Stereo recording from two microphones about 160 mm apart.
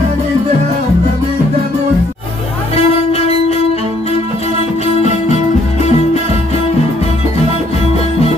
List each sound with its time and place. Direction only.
2.7 s music: 40° left (ahead or behind)